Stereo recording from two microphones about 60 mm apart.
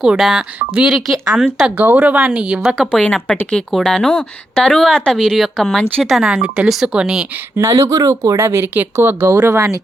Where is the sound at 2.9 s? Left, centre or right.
Left; by 5.8 s centre.